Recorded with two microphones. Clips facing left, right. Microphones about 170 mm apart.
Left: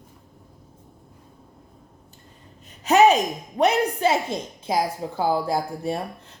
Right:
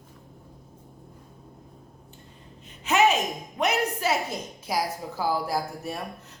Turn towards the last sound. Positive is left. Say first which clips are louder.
# left 5 dB
turn(degrees=30)  # may be behind; listen again after turning